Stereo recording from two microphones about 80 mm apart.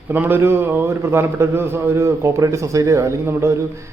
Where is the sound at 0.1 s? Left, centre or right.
Right.